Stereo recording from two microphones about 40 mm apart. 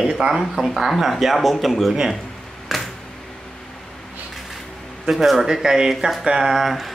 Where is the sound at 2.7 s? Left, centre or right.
Centre.